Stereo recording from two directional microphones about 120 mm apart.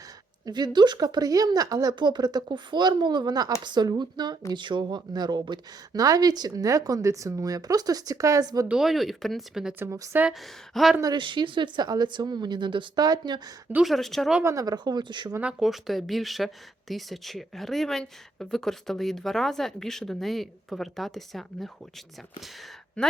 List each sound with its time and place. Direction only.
0.4 s speech: 35° right (ahead or behind)
8.6 s speech: 5° right (ahead or behind)
9.7 s a woman's voice: 25° right (ahead or behind)
10.3 s speech: centre (ahead or behind)
11.0 s speech: 40° right (ahead or behind)
13.7 s speech: centre (ahead or behind)
14.4 s speech: 30° right (ahead or behind)
15.4 s speech: 5° right (ahead or behind)